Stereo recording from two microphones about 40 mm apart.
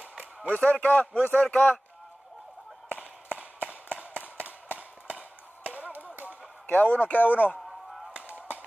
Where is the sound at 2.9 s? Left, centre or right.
Right.